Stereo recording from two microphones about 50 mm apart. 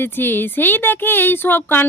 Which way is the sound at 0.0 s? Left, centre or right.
Left.